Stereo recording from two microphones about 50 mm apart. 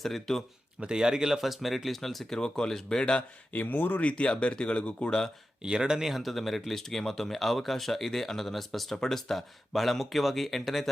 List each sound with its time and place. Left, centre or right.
0.0 s speech: centre
0.8 s speech: centre
3.5 s speech: left
4.0 s speech: left
5.6 s speech: centre